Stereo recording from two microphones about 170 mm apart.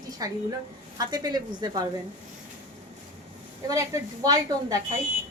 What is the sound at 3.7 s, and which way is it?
Speech, 20° right (ahead or behind).